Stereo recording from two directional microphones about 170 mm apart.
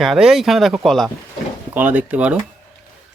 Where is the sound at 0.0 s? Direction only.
Centre (ahead or behind).